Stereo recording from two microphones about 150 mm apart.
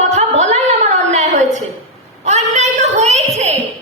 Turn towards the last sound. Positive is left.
turn(degrees=-45)  # may be behind; listen again after turning